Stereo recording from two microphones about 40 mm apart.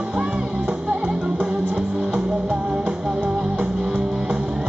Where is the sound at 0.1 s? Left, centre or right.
Right.